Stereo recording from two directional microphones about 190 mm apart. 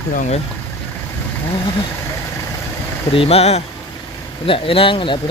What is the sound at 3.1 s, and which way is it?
Speech, 30° left (ahead or behind).